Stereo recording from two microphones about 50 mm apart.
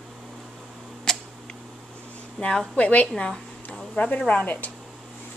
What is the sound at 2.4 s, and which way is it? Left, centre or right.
A woman's voice, centre.